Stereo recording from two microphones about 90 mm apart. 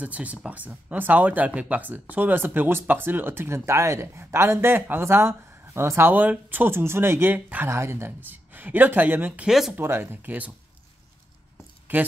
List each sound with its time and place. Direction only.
0.0 s speech: 15° right (ahead or behind)
9.5 s speech: 5° right (ahead or behind)
9.8 s speech: 25° right (ahead or behind)